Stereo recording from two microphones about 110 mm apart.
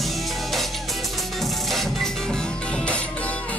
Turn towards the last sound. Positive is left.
turn(degrees=10)  # may be behind; listen again after turning